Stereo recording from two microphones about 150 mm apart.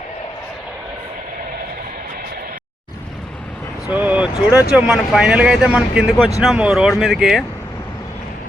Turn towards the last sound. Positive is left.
turn(degrees=-5)  # may be behind; listen again after turning